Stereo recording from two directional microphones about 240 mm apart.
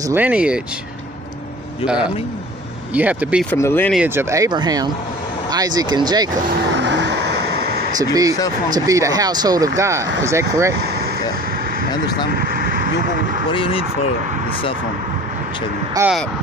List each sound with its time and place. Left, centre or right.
0.1 s speech: centre
1.9 s speech: centre
3.5 s speech: centre
3.9 s speech: centre
6.8 s vehicle: right
8.0 s speech: centre
13.5 s speech: left
15.9 s speech: centre